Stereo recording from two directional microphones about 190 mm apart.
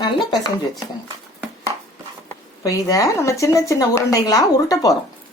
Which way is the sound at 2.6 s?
15° left (ahead or behind).